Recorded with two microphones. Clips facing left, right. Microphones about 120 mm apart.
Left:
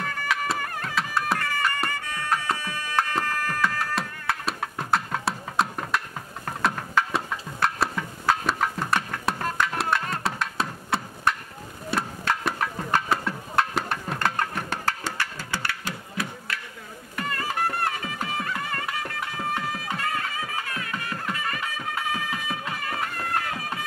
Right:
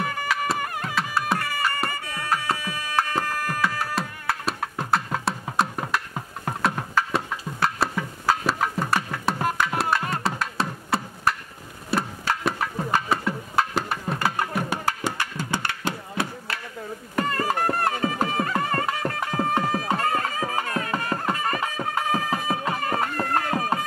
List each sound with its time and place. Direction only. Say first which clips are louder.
0.9 s music: right 1 dB; centre (ahead or behind); by 16.5 s 25° right (ahead or behind)
17.1 s music: right 5 dB; 40° right (ahead or behind)